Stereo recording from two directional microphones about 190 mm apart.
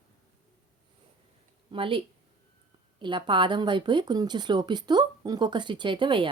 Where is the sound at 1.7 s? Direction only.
25° right (ahead or behind).